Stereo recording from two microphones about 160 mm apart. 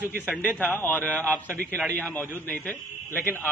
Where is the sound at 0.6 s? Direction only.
10° left (ahead or behind).